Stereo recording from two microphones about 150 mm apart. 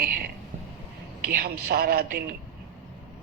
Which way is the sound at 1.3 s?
90° right.